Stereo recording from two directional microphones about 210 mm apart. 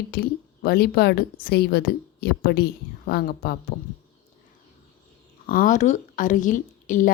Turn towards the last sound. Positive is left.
turn(degrees=40)  # may be behind; listen again after turning